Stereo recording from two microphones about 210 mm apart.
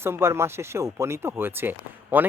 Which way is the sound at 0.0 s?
10° right (ahead or behind).